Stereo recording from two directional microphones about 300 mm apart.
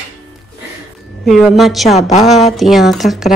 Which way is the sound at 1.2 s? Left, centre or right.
Centre.